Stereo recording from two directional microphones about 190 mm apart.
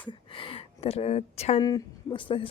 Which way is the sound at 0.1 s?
25° left (ahead or behind).